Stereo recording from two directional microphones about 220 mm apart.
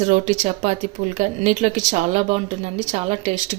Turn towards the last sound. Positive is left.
turn(degrees=-30)  # may be behind; listen again after turning